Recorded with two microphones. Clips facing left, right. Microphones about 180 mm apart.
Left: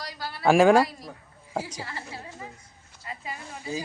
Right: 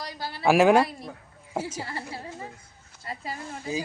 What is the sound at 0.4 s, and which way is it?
Speech, 5° right (ahead or behind).